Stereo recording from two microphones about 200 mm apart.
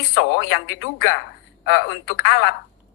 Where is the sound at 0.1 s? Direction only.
65° left (ahead or behind).